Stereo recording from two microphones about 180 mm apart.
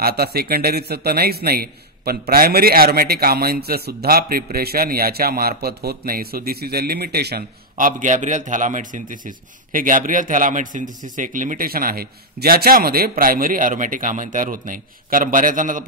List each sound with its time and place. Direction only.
0.0 s a man's voice: 60° right (ahead or behind)